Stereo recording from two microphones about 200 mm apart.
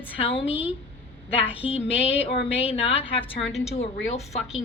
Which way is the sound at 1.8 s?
30° left (ahead or behind).